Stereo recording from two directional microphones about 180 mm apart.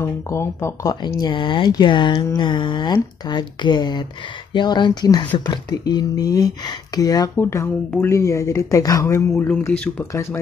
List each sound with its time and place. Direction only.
0.0 s speech: 15° left (ahead or behind)